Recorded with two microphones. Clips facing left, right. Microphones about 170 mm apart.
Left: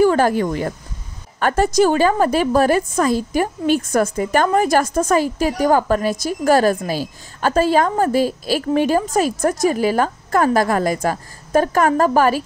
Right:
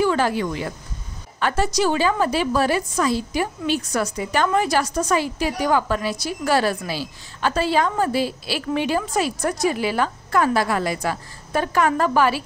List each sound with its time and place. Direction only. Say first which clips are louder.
0.0 s a woman's voice: left 5 dB; 45° left (ahead or behind)